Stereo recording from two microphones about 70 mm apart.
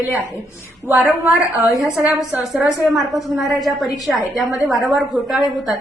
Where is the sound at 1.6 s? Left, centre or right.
Left.